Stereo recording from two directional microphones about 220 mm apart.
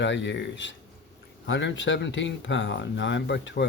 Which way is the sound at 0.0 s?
55° left (ahead or behind).